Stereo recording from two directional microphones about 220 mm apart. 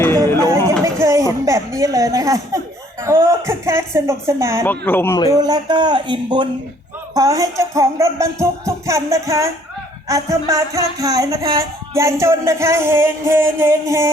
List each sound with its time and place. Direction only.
0.9 s a sound: 15° right (ahead or behind)
3.0 s music: 10° right (ahead or behind)
4.6 s speech: 10° left (ahead or behind)
5.3 s a man's voice: 15° right (ahead or behind)
7.1 s music: 15° right (ahead or behind)